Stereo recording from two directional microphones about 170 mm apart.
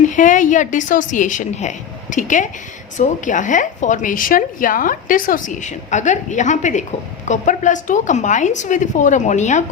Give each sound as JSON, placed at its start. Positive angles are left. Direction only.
{"t": 0.1, "sound": "a woman's voice", "side_deg": 50}